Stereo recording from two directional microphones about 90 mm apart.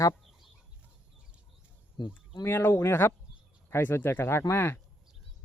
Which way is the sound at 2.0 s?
55° left (ahead or behind).